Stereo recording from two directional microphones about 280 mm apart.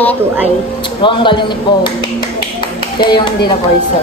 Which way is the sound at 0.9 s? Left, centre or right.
Centre.